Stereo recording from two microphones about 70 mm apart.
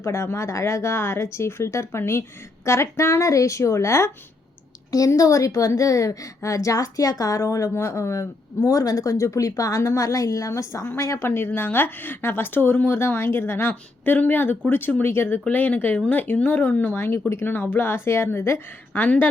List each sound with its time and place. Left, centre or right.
0.0 s a woman's voice: left
4.9 s a woman's voice: left
11.2 s speech: left
15.4 s speech: left
18.9 s speech: left